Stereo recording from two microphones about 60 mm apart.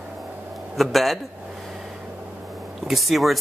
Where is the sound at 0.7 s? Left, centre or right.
Centre.